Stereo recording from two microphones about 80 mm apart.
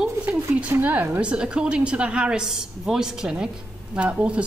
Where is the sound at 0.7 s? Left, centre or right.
Right.